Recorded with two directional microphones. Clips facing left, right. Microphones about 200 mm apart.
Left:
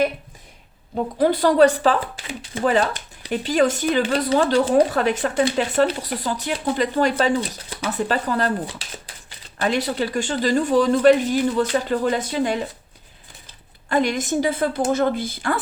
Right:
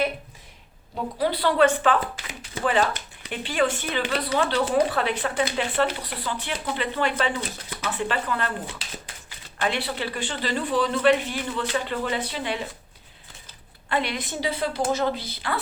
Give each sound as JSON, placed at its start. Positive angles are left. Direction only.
{"t": 1.2, "sound": "speech", "side_deg": 45}
{"t": 9.6, "sound": "speech", "side_deg": 40}
{"t": 13.9, "sound": "speech", "side_deg": 45}